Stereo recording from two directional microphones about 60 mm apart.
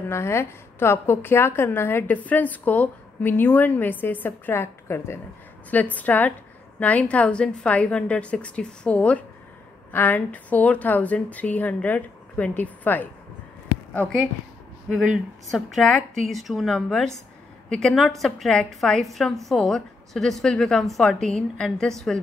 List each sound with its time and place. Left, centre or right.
0.1 s a woman's voice: left
2.2 s a woman's voice: left
5.7 s a woman's voice: left
14.9 s a woman's voice: centre
15.5 s a woman's voice: centre
17.9 s a woman's voice: centre